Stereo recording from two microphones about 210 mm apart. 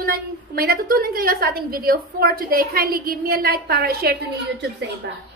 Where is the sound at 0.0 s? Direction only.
45° right (ahead or behind).